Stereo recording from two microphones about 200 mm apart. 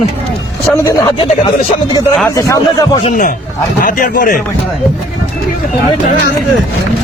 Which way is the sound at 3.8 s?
40° left (ahead or behind).